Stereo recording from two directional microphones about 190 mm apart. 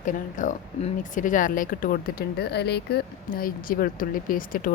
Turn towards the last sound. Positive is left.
turn(degrees=45)  # may be behind; listen again after turning